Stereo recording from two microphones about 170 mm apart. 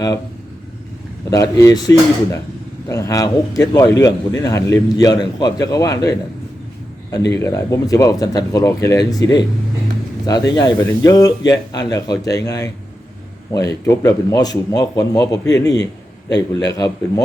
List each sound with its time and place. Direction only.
1.3 s speech: 20° left (ahead or behind)
7.3 s speech: 15° left (ahead or behind)